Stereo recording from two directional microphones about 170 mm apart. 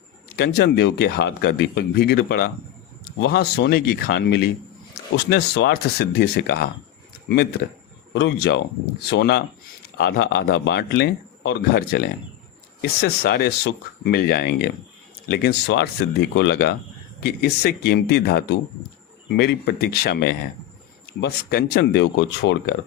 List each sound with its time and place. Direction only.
0.3 s speech: 75° left (ahead or behind)
3.2 s speech: 90° left; by 6.7 s 65° left (ahead or behind)
8.1 s speech: 90° left
9.0 s speech: 75° left (ahead or behind)
15.3 s speech: 85° left